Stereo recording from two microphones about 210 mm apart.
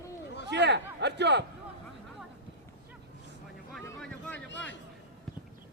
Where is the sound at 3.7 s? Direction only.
5° left (ahead or behind).